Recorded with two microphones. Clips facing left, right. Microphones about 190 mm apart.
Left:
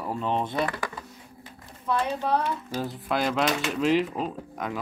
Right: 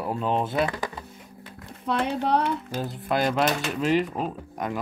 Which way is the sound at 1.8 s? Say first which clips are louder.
Right 1 dB; 70° right (ahead or behind).